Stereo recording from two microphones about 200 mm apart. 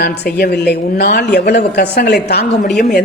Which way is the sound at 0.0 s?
55° left (ahead or behind).